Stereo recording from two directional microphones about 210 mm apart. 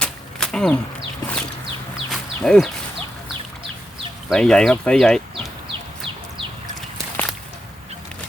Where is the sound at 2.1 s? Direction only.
Centre (ahead or behind).